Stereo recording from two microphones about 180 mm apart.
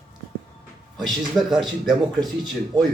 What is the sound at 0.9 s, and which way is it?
Speech, centre (ahead or behind).